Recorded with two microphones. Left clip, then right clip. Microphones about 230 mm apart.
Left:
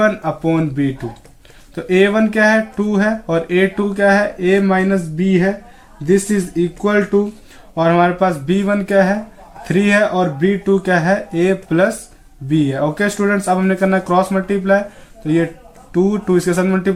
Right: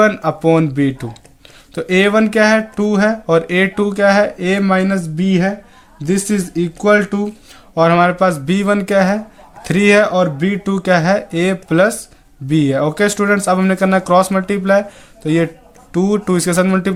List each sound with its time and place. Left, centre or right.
0.0 s speech: right